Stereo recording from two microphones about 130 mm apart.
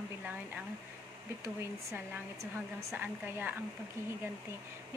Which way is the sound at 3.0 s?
15° right (ahead or behind).